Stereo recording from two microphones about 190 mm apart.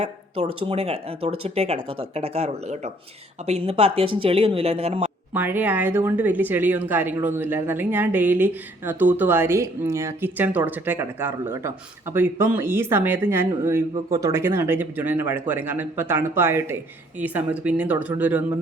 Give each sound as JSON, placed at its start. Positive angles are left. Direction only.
{"t": 0.0, "sound": "speech", "side_deg": -30}
{"t": 5.3, "sound": "speech", "side_deg": -10}